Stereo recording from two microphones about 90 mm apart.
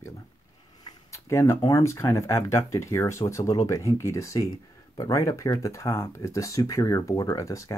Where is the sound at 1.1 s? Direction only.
35° left (ahead or behind).